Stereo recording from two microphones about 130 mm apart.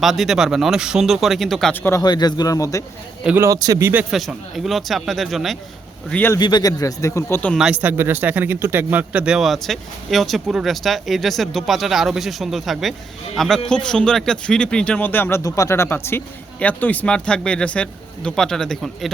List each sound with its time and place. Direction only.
0.0 s speech: centre (ahead or behind)
1.7 s speech: 20° left (ahead or behind)
2.0 s speech: 30° left (ahead or behind)
3.2 s speech: 15° right (ahead or behind)
3.5 s speech: 25° right (ahead or behind)
4.1 s speech: centre (ahead or behind)
6.1 s speech: 10° left (ahead or behind)
6.4 s speech: 30° left (ahead or behind)
7.5 s speech: 5° right (ahead or behind)